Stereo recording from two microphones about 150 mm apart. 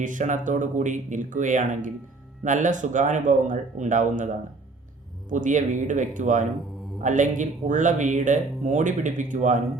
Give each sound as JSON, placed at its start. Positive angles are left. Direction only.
{"t": 0.0, "sound": "speech", "side_deg": -60}
{"t": 5.3, "sound": "speech", "side_deg": -55}